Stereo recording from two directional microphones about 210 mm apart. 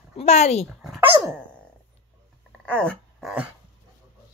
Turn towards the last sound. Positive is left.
turn(degrees=0)  # may be behind; listen again after turning